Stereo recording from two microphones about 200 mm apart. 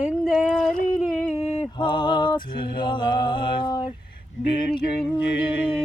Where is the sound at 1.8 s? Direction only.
25° left (ahead or behind).